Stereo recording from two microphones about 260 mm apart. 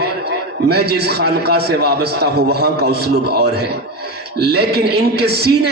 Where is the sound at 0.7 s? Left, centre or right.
Right.